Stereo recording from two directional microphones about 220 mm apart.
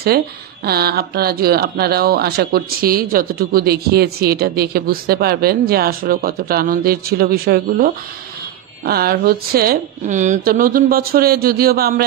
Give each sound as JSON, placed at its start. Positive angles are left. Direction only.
{"t": 0.7, "sound": "speech", "side_deg": -45}